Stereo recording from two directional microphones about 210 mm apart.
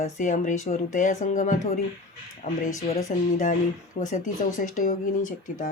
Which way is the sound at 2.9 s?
35° left (ahead or behind).